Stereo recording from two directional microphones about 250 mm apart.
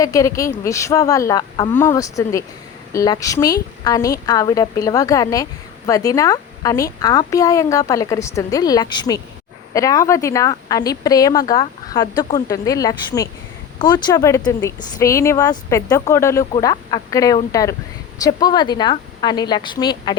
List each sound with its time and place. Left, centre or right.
0.0 s speech: centre